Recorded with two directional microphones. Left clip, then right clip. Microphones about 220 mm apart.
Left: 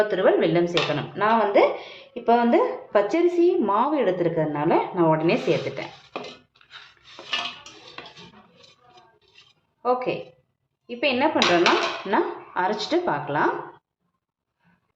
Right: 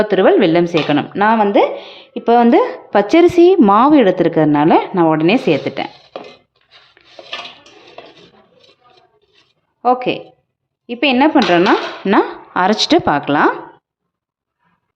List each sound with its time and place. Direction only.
0.0 s speech: 45° right (ahead or behind)
9.8 s speech: 45° right (ahead or behind)